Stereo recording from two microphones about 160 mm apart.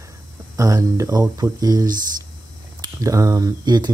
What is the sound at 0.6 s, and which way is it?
Speech, 20° right (ahead or behind).